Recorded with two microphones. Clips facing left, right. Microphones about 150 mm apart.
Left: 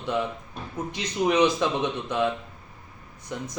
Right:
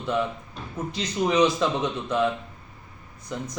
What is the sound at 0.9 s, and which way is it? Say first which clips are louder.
A man's voice: even; 20° left (ahead or behind).